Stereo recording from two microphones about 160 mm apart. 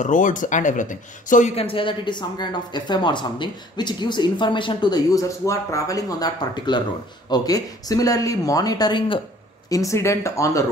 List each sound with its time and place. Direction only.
0.0 s speech: 55° left (ahead or behind)
1.5 s a woman's voice: 35° left (ahead or behind); by 10.6 s 20° left (ahead or behind)